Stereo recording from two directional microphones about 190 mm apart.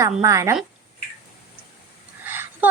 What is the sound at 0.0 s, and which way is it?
Speech, 15° right (ahead or behind).